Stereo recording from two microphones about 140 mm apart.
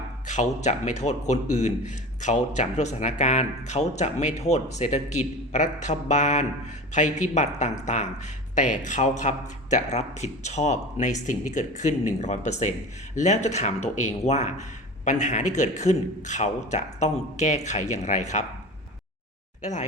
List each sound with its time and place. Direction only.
0.3 s a man's voice: 55° left (ahead or behind)